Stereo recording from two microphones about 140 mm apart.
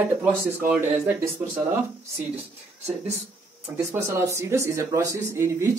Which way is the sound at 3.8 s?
20° right (ahead or behind).